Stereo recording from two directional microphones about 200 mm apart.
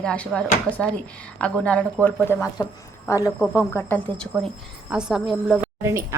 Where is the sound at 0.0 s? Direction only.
5° left (ahead or behind).